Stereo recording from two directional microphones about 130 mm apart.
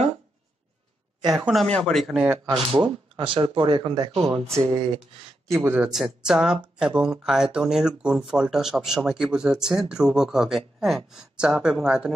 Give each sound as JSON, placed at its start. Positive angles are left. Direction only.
{"t": 1.3, "sound": "speech", "side_deg": 0}
{"t": 2.6, "sound": "speech", "side_deg": -40}
{"t": 5.6, "sound": "speech", "side_deg": -5}